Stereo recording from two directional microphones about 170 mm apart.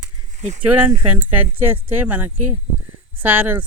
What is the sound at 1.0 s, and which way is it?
Speech, 10° right (ahead or behind).